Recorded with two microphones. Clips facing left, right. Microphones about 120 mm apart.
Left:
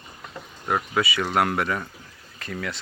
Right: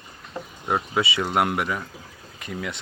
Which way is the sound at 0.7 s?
25° right (ahead or behind).